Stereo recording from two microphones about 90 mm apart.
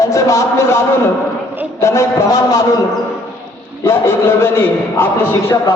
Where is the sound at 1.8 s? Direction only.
35° left (ahead or behind).